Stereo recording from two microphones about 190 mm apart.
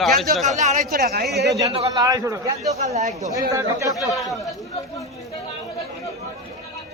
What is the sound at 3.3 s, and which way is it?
Speech, 15° right (ahead or behind).